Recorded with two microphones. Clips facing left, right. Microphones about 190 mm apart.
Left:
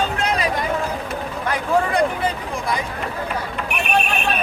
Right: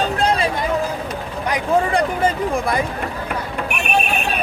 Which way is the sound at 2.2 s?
50° right (ahead or behind).